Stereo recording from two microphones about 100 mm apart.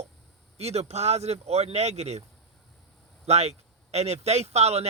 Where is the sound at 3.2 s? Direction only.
90° right.